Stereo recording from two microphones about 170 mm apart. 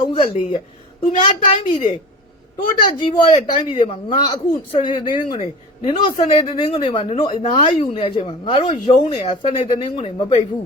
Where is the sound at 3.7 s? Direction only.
35° left (ahead or behind).